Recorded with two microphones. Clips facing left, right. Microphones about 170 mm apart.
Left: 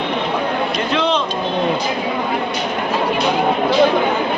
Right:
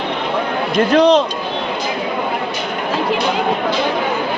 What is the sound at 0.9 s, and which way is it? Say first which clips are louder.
Speech: right 8 dB; 40° right (ahead or behind).